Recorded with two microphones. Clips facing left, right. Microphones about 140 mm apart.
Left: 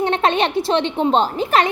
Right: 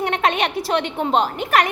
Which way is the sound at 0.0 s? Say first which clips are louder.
Left 3 dB; 30° left (ahead or behind).